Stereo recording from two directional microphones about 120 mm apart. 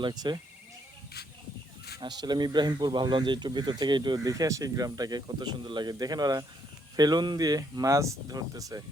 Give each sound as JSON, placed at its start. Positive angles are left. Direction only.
{"t": 0.0, "sound": "speech", "side_deg": -35}
{"t": 2.0, "sound": "speech", "side_deg": -35}